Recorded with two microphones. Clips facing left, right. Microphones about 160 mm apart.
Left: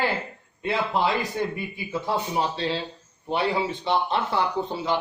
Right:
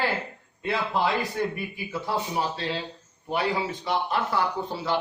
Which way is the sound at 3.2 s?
25° left (ahead or behind).